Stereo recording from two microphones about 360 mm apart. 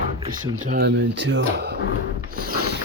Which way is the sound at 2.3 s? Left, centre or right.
Right.